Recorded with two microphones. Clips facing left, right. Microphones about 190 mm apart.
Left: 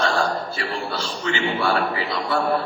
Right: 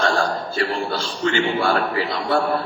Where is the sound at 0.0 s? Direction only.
40° right (ahead or behind).